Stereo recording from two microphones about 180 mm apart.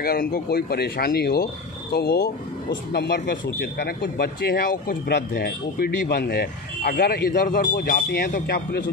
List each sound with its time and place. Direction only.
0.0 s speech: 55° left (ahead or behind)